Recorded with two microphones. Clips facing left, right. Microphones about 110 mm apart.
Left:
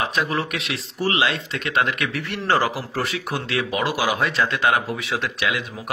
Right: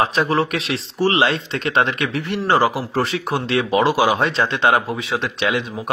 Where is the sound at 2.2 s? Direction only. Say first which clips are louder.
Right 4 dB; 20° right (ahead or behind).